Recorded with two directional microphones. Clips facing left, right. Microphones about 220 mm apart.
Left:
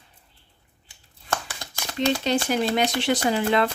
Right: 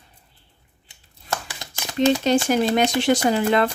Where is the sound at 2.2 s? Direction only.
45° right (ahead or behind).